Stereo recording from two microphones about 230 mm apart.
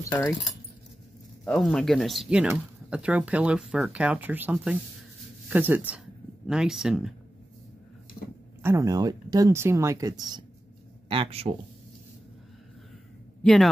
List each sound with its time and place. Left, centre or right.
0.0 s speech: centre
1.4 s speech: centre
8.6 s speech: centre
13.4 s speech: centre